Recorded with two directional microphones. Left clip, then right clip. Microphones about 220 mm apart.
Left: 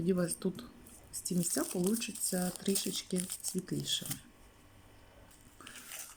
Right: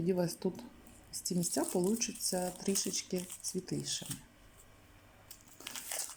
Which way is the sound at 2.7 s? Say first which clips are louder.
Even; 20° left (ahead or behind).